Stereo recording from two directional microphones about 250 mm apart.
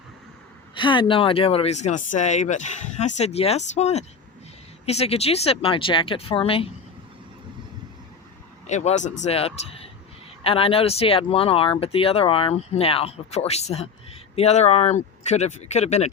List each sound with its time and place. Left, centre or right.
0.7 s speech: centre
8.6 s speech: left